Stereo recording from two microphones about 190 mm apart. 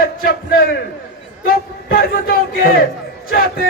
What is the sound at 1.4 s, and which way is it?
A man's voice, 50° left (ahead or behind).